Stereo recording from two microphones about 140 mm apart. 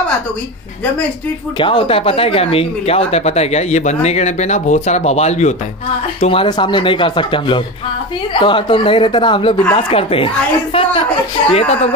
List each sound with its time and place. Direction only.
1.6 s speech: 35° left (ahead or behind)
6.2 s speech: 40° left (ahead or behind)